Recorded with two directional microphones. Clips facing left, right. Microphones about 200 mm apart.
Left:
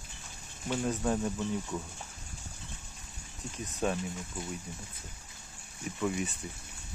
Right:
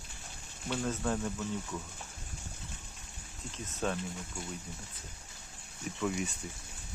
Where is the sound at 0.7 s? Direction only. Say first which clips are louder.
Left 3 dB; 15° left (ahead or behind).